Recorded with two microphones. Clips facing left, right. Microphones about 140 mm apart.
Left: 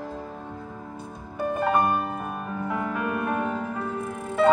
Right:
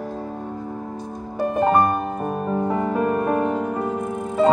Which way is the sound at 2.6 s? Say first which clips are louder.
Right 5 dB; 35° right (ahead or behind).